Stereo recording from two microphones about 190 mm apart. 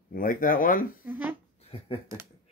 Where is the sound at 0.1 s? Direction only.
45° left (ahead or behind).